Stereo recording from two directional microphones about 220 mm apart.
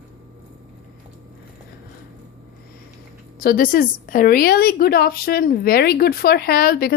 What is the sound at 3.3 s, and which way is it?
A woman's voice, 40° left (ahead or behind).